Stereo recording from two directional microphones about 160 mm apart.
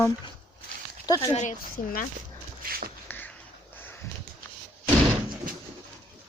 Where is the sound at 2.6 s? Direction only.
65° right (ahead or behind).